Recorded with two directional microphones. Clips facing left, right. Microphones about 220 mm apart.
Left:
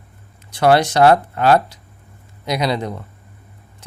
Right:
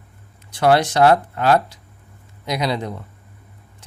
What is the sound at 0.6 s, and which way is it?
Speech, 70° left (ahead or behind).